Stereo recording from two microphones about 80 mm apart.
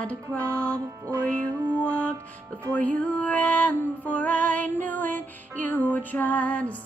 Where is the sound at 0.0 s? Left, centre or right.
Centre.